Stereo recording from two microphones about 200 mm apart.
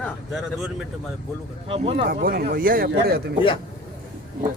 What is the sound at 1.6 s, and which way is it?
Speech, 25° right (ahead or behind).